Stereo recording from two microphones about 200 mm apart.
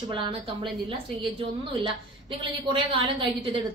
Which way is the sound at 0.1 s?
25° right (ahead or behind).